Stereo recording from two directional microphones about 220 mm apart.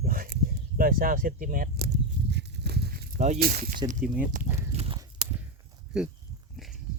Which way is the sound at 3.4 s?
45° right (ahead or behind).